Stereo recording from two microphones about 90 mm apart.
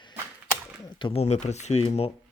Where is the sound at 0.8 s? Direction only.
65° left (ahead or behind).